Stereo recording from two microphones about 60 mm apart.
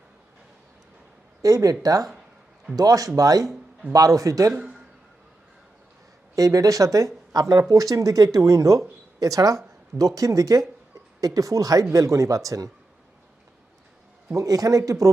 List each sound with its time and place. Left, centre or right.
1.4 s speech: right
1.8 s speech: right
2.7 s speech: right
3.9 s speech: right
6.3 s speech: right
9.2 s speech: right
14.3 s speech: right